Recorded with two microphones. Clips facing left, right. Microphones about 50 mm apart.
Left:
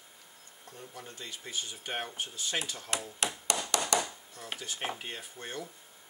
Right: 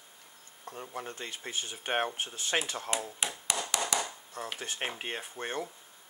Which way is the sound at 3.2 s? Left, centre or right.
Centre.